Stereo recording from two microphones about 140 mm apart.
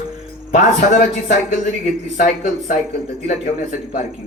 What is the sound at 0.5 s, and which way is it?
Speech, 65° left (ahead or behind).